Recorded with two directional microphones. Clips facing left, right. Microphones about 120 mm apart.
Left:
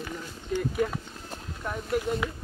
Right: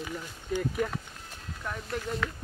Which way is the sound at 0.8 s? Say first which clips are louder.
Left 3 dB; centre (ahead or behind).